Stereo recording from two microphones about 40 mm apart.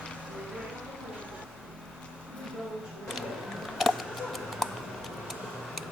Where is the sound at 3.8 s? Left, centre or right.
Centre.